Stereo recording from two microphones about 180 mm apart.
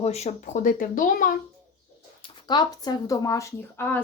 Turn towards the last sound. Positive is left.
turn(degrees=10)  # may be behind; listen again after turning